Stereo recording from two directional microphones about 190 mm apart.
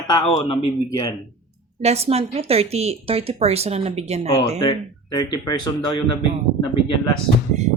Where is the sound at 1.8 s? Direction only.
35° right (ahead or behind).